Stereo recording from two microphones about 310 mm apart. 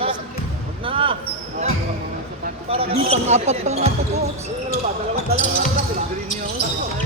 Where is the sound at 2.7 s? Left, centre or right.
Centre.